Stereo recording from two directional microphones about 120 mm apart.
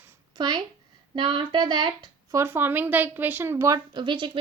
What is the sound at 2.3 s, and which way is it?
Speech, 20° right (ahead or behind).